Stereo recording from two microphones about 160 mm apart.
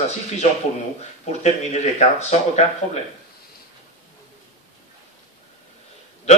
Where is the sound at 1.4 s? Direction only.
45° left (ahead or behind).